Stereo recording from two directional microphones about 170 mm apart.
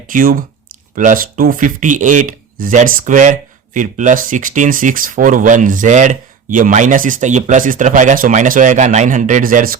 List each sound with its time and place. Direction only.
0.1 s speech: 55° right (ahead or behind)